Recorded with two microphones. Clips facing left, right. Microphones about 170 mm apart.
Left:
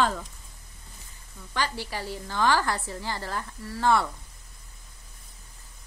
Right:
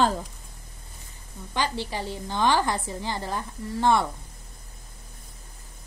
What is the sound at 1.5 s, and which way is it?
A woman's voice, 20° right (ahead or behind).